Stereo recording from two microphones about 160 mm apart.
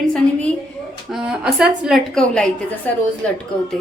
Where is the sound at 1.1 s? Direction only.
5° right (ahead or behind).